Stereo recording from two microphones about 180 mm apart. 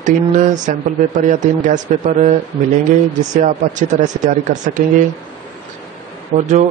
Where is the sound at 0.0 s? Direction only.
45° right (ahead or behind).